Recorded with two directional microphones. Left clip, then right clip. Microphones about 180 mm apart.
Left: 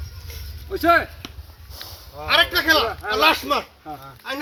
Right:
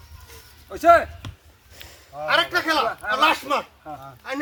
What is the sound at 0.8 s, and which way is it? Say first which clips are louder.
Speech: right 2 dB; 55° right (ahead or behind).